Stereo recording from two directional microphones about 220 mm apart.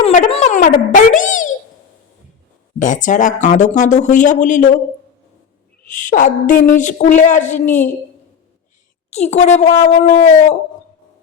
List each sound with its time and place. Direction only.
0.0 s a child's voice: 30° left (ahead or behind)
2.7 s speech: 35° left (ahead or behind)
5.9 s speech: 35° left (ahead or behind)
9.0 s speech: 30° left (ahead or behind)